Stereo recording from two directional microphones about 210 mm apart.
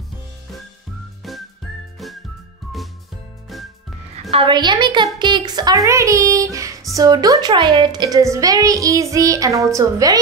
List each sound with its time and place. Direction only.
4.3 s a woman's voice: 25° right (ahead or behind)